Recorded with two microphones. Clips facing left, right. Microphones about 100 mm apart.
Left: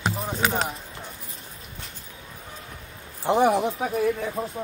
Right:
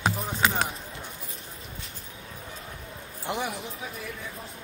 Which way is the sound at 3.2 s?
30° left (ahead or behind).